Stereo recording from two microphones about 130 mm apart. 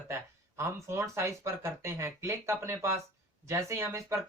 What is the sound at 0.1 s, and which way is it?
Speech, 20° right (ahead or behind).